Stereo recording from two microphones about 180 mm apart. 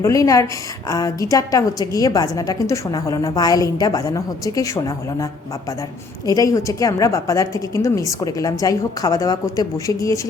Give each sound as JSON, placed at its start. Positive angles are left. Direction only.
{"t": 0.0, "sound": "a woman's voice", "side_deg": 20}